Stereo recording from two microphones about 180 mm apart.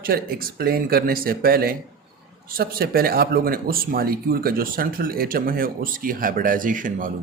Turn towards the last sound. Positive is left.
turn(degrees=-50)  # may be behind; listen again after turning